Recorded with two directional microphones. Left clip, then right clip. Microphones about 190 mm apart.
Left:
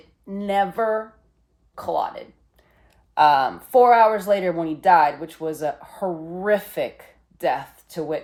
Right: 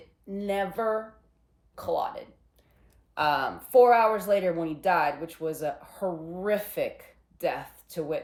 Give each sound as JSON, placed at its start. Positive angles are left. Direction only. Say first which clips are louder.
{"t": 0.3, "sound": "speech", "louder": "left 8 dB", "side_deg": 15}